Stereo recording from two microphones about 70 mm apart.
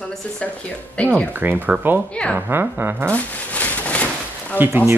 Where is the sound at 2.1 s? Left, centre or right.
Centre.